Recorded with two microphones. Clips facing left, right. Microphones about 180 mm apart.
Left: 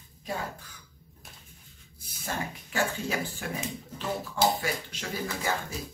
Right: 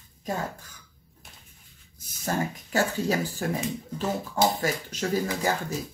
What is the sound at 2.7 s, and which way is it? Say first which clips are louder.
Speech: right 5 dB; 40° right (ahead or behind).